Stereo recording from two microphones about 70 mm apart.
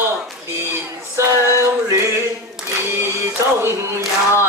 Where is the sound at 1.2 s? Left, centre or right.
Right.